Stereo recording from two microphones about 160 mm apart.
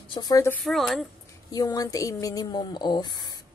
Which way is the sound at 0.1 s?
25° left (ahead or behind).